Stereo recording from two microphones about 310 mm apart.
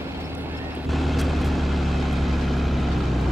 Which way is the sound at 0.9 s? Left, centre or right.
Centre.